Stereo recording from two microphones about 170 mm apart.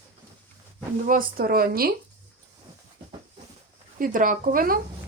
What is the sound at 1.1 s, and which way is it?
Speech, 55° right (ahead or behind).